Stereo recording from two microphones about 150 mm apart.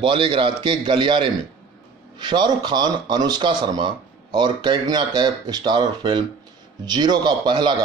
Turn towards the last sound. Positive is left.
turn(degrees=-30)  # may be behind; listen again after turning